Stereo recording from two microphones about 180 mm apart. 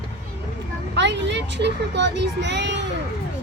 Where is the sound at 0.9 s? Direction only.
75° right (ahead or behind).